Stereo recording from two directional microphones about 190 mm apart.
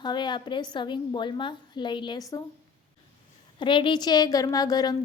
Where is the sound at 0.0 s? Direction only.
25° left (ahead or behind).